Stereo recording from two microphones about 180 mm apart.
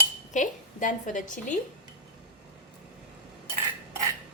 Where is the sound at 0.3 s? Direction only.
45° left (ahead or behind).